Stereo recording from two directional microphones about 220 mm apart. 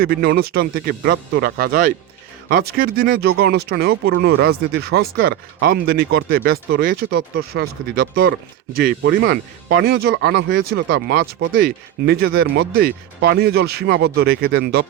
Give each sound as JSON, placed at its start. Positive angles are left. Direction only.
{"t": 0.0, "sound": "speech", "side_deg": -45}